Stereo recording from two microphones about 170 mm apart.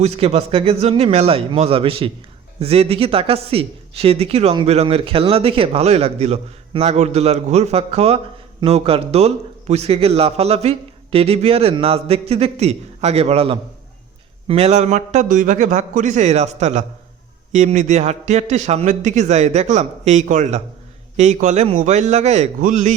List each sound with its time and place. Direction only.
0.0 s a man's voice: 40° right (ahead or behind)